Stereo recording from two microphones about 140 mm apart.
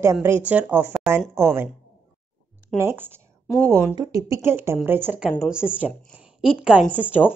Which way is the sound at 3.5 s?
5° left (ahead or behind).